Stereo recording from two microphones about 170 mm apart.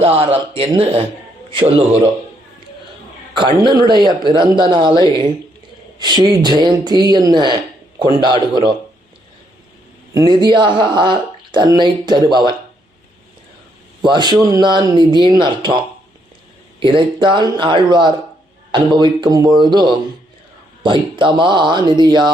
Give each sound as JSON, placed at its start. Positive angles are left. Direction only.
{"t": 0.0, "sound": "speech", "side_deg": -35}
{"t": 3.3, "sound": "speech", "side_deg": -30}
{"t": 10.2, "sound": "speech", "side_deg": -25}
{"t": 14.0, "sound": "speech", "side_deg": -25}
{"t": 16.8, "sound": "speech", "side_deg": -30}